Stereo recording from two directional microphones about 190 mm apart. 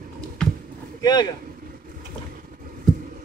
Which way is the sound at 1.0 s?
20° left (ahead or behind).